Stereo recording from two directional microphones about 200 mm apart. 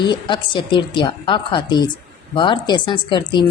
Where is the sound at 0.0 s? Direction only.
25° left (ahead or behind).